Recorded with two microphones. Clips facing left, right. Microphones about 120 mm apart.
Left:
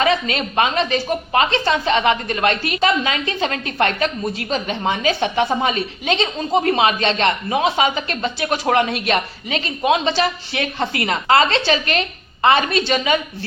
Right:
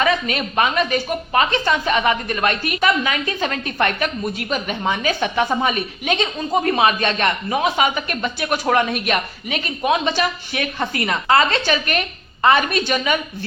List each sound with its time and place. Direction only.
0.0 s a woman's voice: 30° left (ahead or behind)